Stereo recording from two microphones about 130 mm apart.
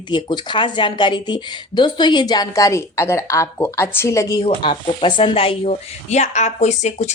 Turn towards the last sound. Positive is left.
turn(degrees=60)  # may be behind; listen again after turning